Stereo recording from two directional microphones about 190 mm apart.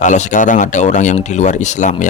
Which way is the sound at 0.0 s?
40° left (ahead or behind).